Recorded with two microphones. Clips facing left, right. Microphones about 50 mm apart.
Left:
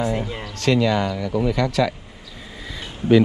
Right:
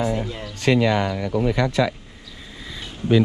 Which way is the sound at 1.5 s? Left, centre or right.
Right.